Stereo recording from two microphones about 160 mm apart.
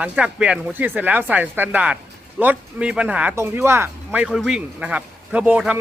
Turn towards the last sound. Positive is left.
turn(degrees=-10)  # may be behind; listen again after turning